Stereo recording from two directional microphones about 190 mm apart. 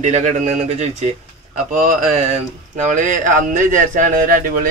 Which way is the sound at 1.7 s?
45° right (ahead or behind).